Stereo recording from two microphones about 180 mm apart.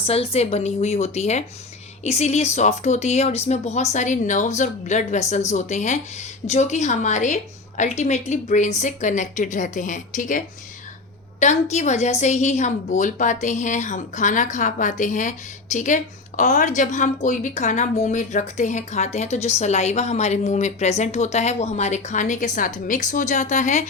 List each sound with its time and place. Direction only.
0.0 s a woman's voice: 35° left (ahead or behind)